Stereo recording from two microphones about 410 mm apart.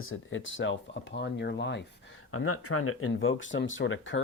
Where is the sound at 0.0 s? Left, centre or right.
Left.